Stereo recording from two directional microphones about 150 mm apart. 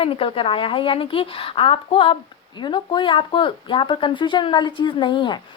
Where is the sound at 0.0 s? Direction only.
40° left (ahead or behind).